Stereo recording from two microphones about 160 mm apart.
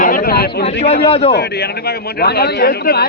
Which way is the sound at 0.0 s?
65° left (ahead or behind).